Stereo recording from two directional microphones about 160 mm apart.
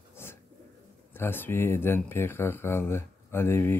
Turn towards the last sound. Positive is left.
turn(degrees=15)  # may be behind; listen again after turning